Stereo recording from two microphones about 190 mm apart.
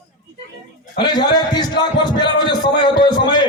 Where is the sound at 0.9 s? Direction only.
20° left (ahead or behind).